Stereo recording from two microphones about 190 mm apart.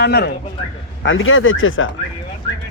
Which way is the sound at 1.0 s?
90° left.